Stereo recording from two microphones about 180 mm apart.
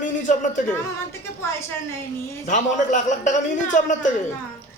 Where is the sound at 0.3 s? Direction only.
45° left (ahead or behind).